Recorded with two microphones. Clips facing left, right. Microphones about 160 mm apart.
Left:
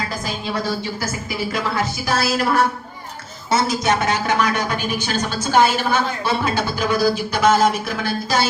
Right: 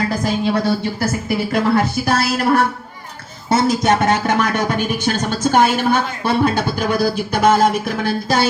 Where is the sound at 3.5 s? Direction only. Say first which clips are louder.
Right 4 dB; 50° right (ahead or behind).